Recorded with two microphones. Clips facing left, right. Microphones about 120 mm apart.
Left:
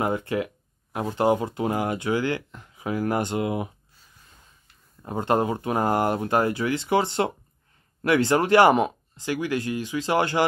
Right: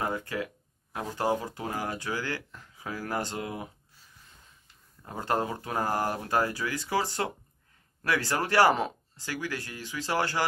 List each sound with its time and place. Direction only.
0.0 s speech: 20° left (ahead or behind)
5.0 s speech: 20° left (ahead or behind)